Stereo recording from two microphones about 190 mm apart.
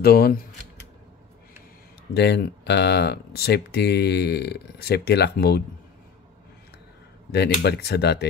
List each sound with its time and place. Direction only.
0.0 s speech: 55° left (ahead or behind)
2.1 s speech: 60° left (ahead or behind)
7.2 s speech: 60° left (ahead or behind)